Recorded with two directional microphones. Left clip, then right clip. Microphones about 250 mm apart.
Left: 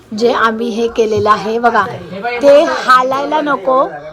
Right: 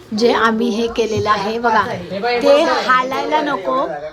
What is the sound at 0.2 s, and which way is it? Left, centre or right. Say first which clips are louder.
A woman's voice: left 2 dB; centre.